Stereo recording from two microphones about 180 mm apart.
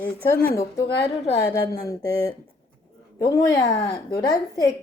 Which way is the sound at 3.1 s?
20° left (ahead or behind).